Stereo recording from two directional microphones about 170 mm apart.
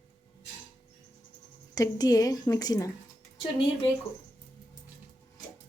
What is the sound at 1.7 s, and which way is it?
A woman's voice, 20° left (ahead or behind).